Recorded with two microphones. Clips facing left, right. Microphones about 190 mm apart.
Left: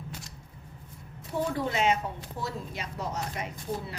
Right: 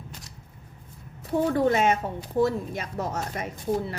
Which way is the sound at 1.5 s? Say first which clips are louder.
Right 5 dB; 50° right (ahead or behind).